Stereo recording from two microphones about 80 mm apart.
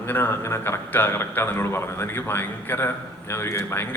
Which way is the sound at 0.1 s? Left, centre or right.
Left.